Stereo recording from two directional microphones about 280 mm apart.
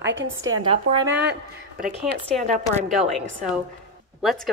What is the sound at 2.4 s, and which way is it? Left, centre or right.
Speech, right.